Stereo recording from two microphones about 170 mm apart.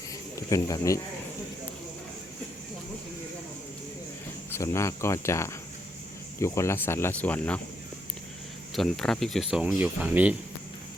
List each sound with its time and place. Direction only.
0.3 s speech: 20° left (ahead or behind)
4.5 s speech: 15° left (ahead or behind)
8.7 s speech: centre (ahead or behind)